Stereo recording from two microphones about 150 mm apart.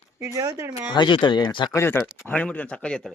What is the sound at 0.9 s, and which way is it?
Speech, 30° left (ahead or behind).